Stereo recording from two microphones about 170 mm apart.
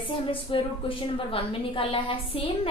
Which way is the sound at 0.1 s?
30° left (ahead or behind).